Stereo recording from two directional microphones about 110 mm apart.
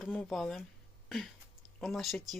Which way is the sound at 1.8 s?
Centre (ahead or behind).